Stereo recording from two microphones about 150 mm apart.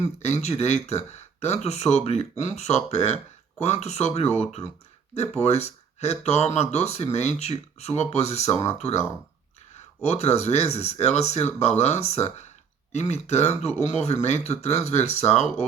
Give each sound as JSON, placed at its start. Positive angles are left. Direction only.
{"t": 0.2, "sound": "speech", "side_deg": 45}